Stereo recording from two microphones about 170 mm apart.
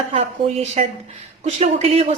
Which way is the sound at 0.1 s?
40° right (ahead or behind).